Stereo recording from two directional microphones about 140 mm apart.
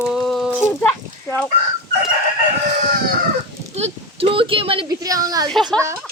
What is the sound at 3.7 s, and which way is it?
Speech, 45° right (ahead or behind).